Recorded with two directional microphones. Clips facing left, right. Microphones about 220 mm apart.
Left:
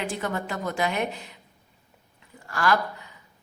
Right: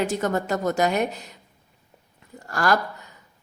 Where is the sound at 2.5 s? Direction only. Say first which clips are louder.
Right 2 dB; 40° right (ahead or behind).